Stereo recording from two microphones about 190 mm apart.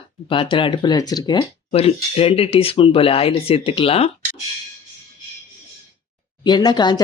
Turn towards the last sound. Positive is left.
turn(degrees=20)  # may be behind; listen again after turning